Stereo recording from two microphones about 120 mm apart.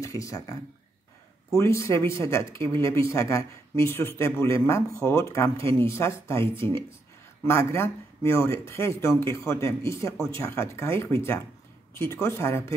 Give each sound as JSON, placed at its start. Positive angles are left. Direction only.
{"t": 0.0, "sound": "speech", "side_deg": 30}